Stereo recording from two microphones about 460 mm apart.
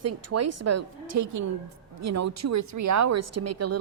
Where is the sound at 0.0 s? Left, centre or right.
Right.